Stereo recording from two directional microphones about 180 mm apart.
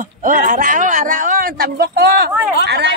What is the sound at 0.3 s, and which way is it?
Speech, 50° right (ahead or behind).